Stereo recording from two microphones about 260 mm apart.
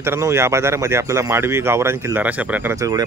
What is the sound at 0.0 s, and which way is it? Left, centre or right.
Speech, centre.